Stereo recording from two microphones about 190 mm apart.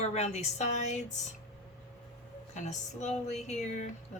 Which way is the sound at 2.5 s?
40° left (ahead or behind).